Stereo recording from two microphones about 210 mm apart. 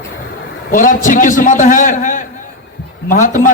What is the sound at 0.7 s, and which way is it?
A man's voice, 40° left (ahead or behind).